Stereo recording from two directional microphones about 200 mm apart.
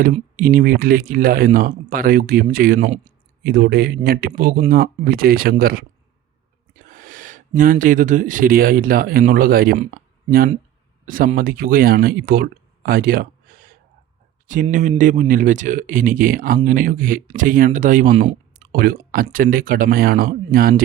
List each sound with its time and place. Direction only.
0.3 s speech: 45° right (ahead or behind)